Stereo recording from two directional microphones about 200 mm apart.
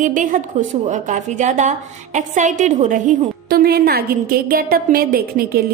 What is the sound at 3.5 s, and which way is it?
A woman's voice, 50° right (ahead or behind).